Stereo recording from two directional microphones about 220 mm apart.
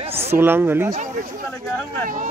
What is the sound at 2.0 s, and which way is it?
Speech, 40° right (ahead or behind).